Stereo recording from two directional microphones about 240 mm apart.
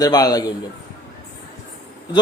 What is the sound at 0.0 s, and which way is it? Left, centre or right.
Speech, centre.